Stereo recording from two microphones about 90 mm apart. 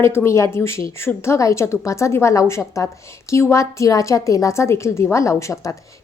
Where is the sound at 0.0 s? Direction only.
30° left (ahead or behind).